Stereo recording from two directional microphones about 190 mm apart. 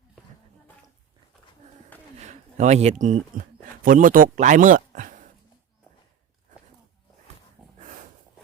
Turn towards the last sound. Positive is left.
turn(degrees=-5)  # may be behind; listen again after turning